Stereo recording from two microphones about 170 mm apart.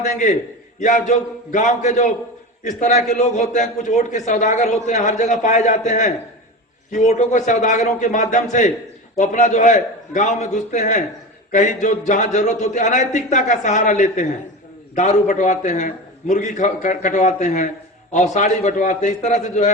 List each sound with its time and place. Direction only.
0.0 s a man's voice: 45° left (ahead or behind)